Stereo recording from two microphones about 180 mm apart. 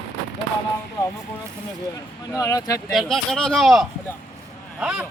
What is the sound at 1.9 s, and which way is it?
Speech, 20° left (ahead or behind).